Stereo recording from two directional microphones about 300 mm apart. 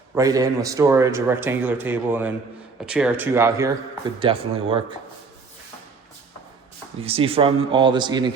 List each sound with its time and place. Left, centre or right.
0.1 s speech: centre
7.0 s speech: centre